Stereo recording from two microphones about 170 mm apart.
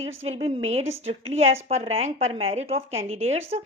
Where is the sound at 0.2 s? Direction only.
35° right (ahead or behind).